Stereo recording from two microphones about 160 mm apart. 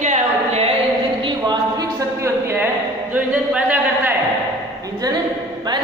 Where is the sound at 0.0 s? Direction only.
45° right (ahead or behind).